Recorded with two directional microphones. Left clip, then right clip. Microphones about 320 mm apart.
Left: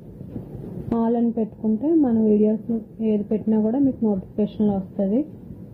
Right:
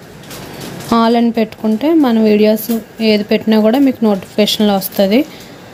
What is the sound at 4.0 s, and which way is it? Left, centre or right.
Speech, right.